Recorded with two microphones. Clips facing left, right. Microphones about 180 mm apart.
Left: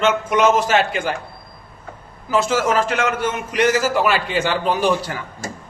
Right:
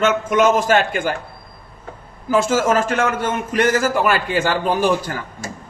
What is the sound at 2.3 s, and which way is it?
A man's voice, 50° right (ahead or behind).